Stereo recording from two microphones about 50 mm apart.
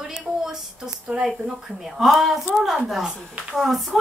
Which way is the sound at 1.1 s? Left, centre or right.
Centre.